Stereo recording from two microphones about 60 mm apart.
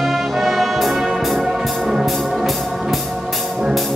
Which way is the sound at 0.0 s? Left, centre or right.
Centre.